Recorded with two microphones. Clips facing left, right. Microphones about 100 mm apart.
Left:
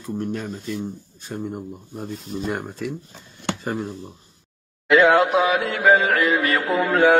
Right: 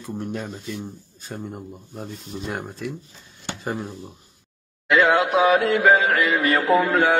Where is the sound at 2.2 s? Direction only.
40° left (ahead or behind).